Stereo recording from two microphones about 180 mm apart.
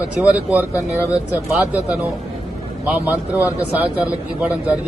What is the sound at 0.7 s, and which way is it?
Speech, 15° left (ahead or behind).